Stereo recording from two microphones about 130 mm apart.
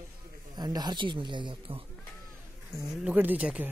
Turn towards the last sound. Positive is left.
turn(degrees=-10)  # may be behind; listen again after turning